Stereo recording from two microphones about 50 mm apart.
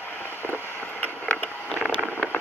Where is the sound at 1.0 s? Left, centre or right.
Left.